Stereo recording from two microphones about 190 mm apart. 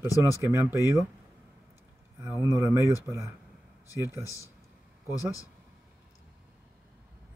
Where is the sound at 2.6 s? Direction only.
15° right (ahead or behind).